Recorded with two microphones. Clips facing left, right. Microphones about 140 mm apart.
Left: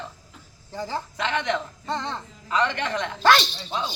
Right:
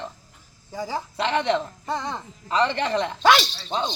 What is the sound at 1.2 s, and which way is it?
Speech, 30° right (ahead or behind).